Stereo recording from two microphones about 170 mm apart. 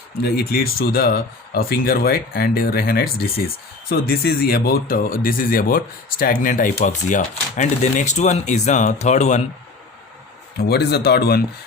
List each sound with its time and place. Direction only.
0.2 s speech: 65° left (ahead or behind); by 9.4 s 45° left (ahead or behind)
10.6 s speech: 70° left (ahead or behind)